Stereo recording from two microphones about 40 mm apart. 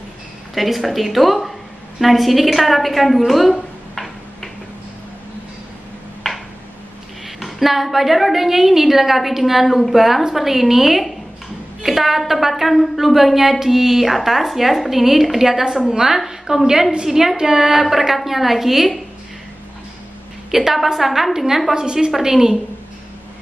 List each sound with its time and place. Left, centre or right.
0.6 s a woman's voice: centre
3.9 s tick-tock: centre
7.2 s a woman's voice: centre
20.5 s a woman's voice: centre
21.7 s a woman's voice: centre